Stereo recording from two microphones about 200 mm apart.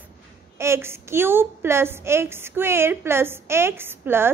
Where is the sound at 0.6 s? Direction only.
10° right (ahead or behind).